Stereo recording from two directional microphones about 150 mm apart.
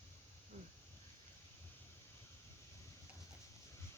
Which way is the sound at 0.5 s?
55° right (ahead or behind).